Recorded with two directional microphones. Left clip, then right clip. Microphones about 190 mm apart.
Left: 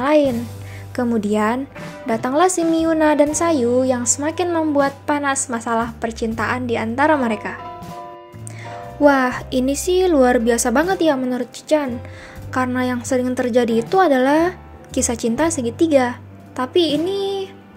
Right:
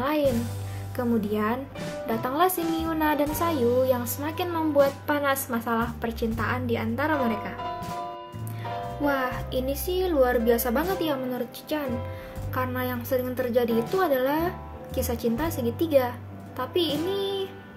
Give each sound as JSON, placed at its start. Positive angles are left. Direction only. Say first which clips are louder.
{"t": 0.0, "sound": "music", "louder": "left 9 dB", "side_deg": 35}
{"t": 0.9, "sound": "a woman's voice", "louder": "left 7 dB", "side_deg": 40}
{"t": 9.0, "sound": "a woman's voice", "louder": "left 12 dB", "side_deg": 45}
{"t": 17.1, "sound": "music", "louder": "left 6 dB", "side_deg": 35}